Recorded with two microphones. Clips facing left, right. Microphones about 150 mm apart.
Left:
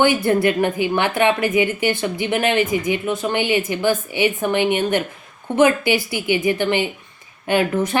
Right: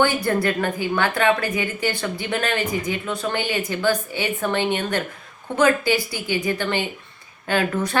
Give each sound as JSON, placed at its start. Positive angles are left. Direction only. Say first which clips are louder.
{"t": 0.0, "sound": "a woman's voice", "louder": "left 4 dB", "side_deg": 20}